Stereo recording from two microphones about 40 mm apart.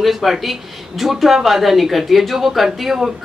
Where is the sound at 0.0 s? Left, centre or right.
Centre.